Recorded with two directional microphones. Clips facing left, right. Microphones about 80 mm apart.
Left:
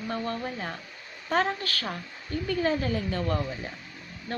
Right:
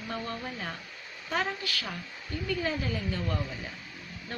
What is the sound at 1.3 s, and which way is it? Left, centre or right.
A woman's voice, left.